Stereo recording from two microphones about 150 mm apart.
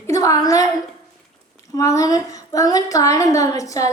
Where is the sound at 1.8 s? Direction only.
20° left (ahead or behind).